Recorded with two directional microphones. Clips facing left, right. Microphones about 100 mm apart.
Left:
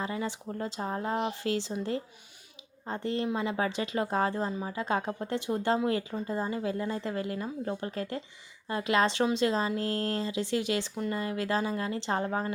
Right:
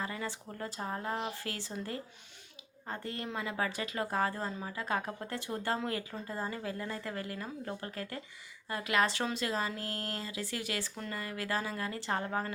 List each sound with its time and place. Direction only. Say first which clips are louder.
0.0 s speech: left 5 dB; 20° left (ahead or behind)
2.8 s speech: left 8 dB; 20° left (ahead or behind)